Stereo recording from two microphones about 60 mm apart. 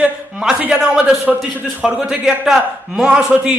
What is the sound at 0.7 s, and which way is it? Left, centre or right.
A man's voice, centre.